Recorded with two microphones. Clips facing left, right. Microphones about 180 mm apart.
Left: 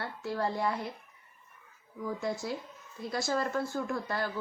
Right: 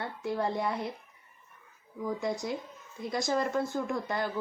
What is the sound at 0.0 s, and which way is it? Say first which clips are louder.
Speech: right 2 dB; 20° right (ahead or behind).